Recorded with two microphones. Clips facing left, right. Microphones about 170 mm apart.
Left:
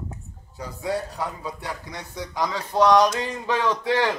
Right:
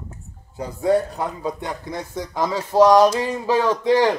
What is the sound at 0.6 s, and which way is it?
A man's voice, 50° right (ahead or behind).